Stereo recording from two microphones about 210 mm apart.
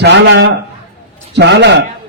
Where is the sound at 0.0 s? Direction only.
55° right (ahead or behind).